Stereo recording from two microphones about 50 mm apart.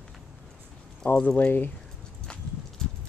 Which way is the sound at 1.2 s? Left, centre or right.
Left.